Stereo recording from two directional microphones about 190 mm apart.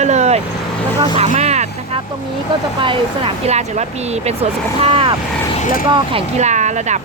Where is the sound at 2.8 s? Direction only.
25° right (ahead or behind).